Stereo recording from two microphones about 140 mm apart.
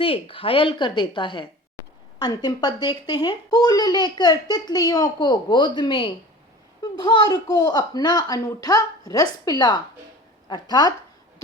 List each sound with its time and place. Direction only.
0.0 s speech: 40° left (ahead or behind)